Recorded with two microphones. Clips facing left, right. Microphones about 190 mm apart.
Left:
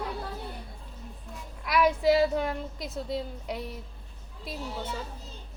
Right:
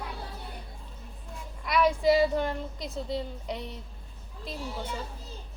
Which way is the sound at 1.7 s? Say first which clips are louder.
Even; centre (ahead or behind).